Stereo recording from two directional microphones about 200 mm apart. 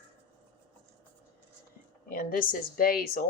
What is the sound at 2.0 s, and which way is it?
A woman's voice, 45° left (ahead or behind).